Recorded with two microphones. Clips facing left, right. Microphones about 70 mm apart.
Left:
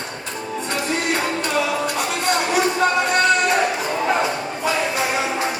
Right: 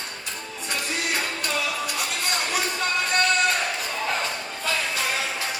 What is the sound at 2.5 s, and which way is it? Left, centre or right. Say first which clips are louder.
Music: left 9 dB; centre.